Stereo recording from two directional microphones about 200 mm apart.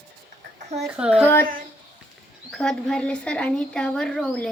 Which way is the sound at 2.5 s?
5° left (ahead or behind).